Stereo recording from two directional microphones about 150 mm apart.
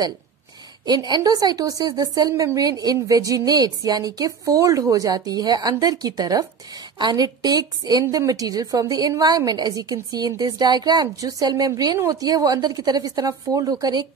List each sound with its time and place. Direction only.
0.8 s a woman's voice: 25° right (ahead or behind)